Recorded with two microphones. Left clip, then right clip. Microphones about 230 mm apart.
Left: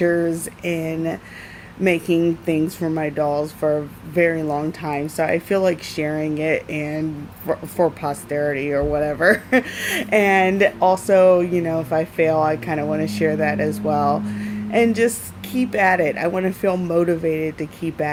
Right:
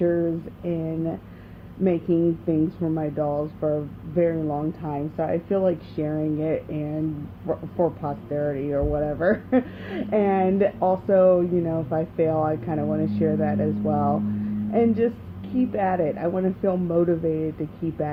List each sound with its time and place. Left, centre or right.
0.0 s speech: left